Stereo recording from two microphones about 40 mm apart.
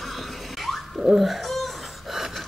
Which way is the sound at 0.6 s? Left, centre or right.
Centre.